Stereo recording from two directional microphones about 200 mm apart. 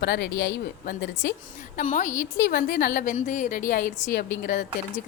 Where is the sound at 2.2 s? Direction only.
50° left (ahead or behind).